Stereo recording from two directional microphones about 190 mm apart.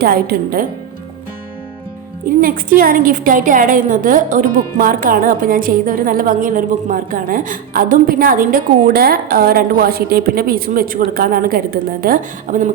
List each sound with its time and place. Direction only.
0.0 s a woman's voice: 55° right (ahead or behind)
2.2 s a woman's voice: 50° right (ahead or behind)